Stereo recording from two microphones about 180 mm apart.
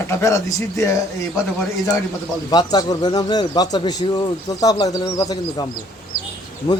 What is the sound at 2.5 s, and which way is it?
Speech, 25° left (ahead or behind).